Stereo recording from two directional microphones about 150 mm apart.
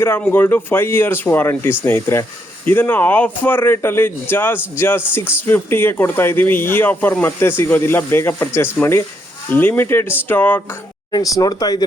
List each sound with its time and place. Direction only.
0.0 s speech: 15° left (ahead or behind)
11.1 s speech: 25° left (ahead or behind)